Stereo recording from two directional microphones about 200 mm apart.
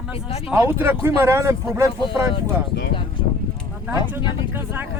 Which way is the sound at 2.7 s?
55° left (ahead or behind).